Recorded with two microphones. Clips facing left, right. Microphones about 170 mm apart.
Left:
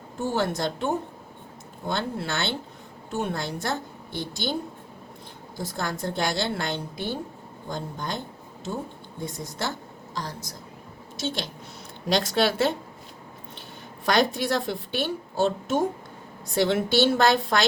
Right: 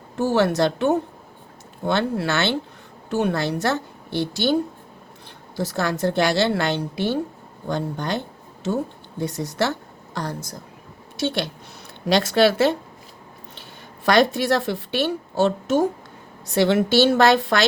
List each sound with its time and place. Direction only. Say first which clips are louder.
0.2 s a woman's voice: right 7 dB; 75° right (ahead or behind)
5.5 s a woman's voice: right 7 dB; 75° right (ahead or behind)
14.0 s a woman's voice: right 5 dB; 70° right (ahead or behind)